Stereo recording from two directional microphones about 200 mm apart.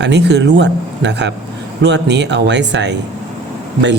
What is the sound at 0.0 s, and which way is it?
Speech, 60° right (ahead or behind).